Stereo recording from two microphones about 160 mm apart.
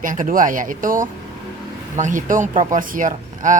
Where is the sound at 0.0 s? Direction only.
55° right (ahead or behind).